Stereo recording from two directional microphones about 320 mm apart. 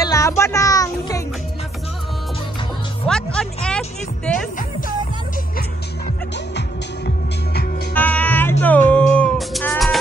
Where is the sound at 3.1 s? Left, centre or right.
Centre.